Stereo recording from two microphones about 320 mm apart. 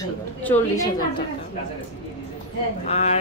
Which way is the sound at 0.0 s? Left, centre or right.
Centre.